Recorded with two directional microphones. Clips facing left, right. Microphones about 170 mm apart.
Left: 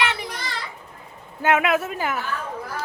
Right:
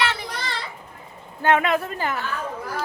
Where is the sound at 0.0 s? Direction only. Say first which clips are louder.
Even; 15° left (ahead or behind).